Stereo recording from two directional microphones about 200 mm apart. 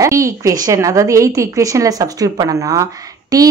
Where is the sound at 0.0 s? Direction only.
15° right (ahead or behind).